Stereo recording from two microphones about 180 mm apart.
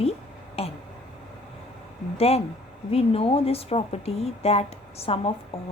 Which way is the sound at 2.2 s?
35° left (ahead or behind).